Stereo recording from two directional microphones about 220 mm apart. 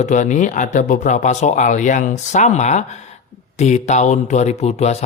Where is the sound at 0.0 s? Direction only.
35° left (ahead or behind).